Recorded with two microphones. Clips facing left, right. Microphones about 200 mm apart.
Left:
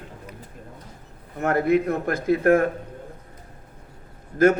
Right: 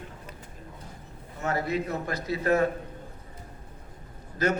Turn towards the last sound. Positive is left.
turn(degrees=50)  # may be behind; listen again after turning